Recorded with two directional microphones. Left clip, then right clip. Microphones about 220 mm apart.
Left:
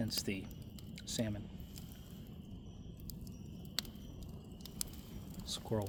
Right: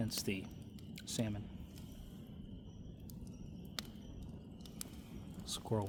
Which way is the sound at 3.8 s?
50° left (ahead or behind).